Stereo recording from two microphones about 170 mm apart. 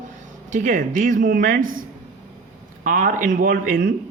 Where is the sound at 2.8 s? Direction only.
50° right (ahead or behind).